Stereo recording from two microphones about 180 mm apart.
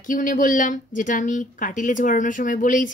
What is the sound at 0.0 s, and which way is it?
Speech, 45° left (ahead or behind).